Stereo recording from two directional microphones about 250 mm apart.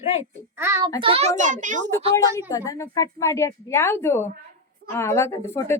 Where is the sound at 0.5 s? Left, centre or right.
Centre.